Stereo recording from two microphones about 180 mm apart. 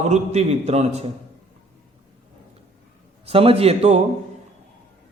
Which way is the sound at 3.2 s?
30° right (ahead or behind).